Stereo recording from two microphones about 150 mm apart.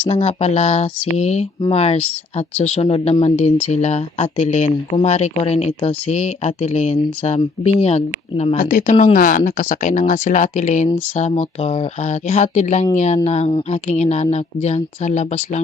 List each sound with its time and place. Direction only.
0.0 s speech: 45° left (ahead or behind)
8.5 s speech: 60° left (ahead or behind)